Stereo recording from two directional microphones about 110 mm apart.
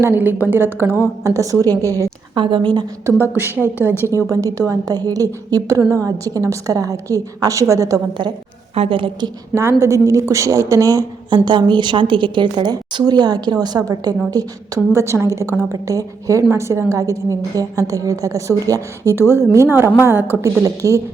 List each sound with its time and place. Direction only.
0.0 s a woman's voice: 15° right (ahead or behind)
2.3 s a woman's voice: 50° right (ahead or behind)
3.1 s a woman's voice: 20° right (ahead or behind)
8.7 s a woman's voice: 60° right (ahead or behind)
9.6 s a woman's voice: 25° right (ahead or behind)
11.4 s a woman's voice: 45° right (ahead or behind); by 21.0 s 30° right (ahead or behind)